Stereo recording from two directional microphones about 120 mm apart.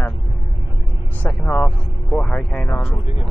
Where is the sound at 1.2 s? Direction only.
15° left (ahead or behind).